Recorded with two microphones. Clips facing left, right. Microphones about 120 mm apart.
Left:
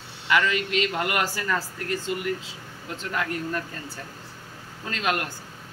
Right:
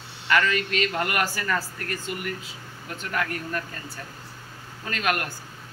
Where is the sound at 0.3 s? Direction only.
15° left (ahead or behind).